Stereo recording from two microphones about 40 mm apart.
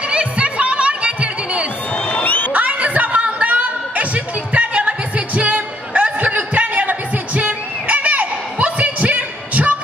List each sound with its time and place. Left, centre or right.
0.1 s chatter: right
2.2 s crowd: left
2.5 s a sound: right